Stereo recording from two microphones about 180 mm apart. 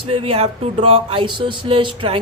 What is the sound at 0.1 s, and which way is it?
Speech, 30° right (ahead or behind).